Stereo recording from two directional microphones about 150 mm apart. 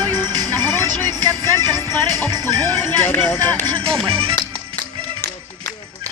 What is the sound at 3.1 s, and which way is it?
Music, 15° left (ahead or behind).